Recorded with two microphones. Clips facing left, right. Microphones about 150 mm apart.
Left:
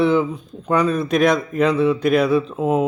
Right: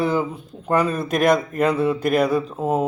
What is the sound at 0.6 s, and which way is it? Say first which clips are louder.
A man's voice: left 2 dB; 5° right (ahead or behind).